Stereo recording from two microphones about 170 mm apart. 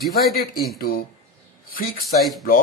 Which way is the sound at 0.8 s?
60° left (ahead or behind).